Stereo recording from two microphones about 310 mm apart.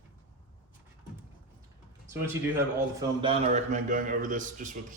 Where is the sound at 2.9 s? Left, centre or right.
Centre.